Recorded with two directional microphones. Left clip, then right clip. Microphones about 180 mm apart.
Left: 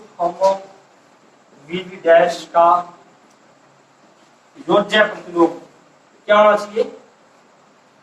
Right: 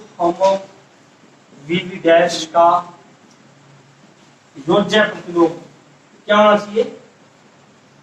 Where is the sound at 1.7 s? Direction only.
20° right (ahead or behind).